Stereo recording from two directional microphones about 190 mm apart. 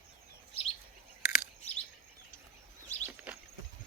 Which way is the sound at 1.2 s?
5° right (ahead or behind).